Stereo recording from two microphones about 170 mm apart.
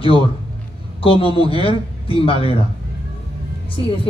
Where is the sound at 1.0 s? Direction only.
30° left (ahead or behind).